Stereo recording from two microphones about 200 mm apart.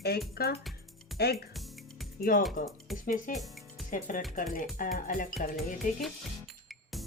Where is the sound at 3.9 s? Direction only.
40° left (ahead or behind).